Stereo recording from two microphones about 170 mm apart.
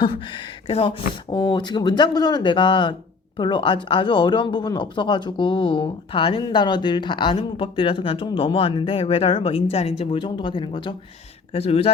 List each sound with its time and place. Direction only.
0.0 s speech: 30° left (ahead or behind)